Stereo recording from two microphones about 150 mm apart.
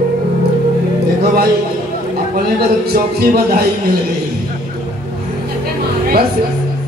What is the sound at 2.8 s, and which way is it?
Speech, 90° right.